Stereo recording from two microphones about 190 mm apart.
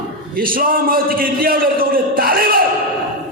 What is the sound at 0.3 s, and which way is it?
A man's voice, 50° right (ahead or behind).